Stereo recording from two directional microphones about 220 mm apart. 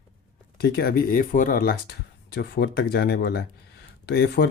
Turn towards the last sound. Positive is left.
turn(degrees=50)  # may be behind; listen again after turning